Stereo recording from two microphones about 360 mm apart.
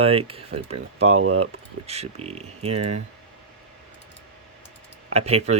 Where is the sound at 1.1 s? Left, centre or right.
Right.